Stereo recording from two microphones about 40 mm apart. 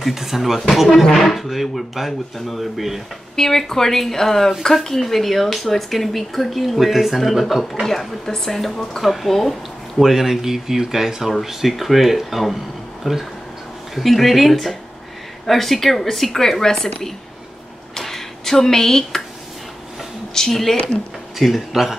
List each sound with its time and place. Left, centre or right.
0.0 s speech: centre
0.8 s speech: centre
3.3 s speech: centre
17.9 s a sound: centre
20.3 s speech: centre
20.7 s speech: left
21.4 s speech: centre